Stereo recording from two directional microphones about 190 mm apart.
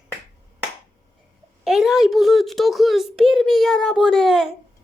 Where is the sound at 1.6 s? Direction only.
Centre (ahead or behind).